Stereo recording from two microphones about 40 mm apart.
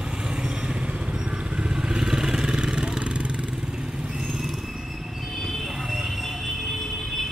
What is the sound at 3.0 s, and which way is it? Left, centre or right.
Motorcycle, right.